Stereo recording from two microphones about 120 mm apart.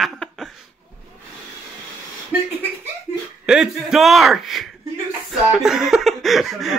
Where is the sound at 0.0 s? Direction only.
5° left (ahead or behind).